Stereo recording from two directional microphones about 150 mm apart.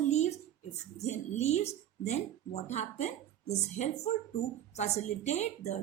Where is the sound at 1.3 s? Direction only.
50° left (ahead or behind).